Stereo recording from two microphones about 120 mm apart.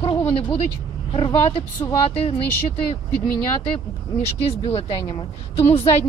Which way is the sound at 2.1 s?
55° left (ahead or behind).